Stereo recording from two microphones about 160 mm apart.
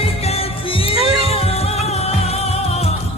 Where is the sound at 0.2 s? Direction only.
40° left (ahead or behind).